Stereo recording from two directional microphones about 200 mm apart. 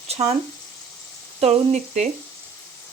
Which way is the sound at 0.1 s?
30° right (ahead or behind).